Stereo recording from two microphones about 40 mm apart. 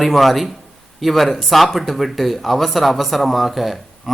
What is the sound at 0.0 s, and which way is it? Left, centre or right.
Speech, centre.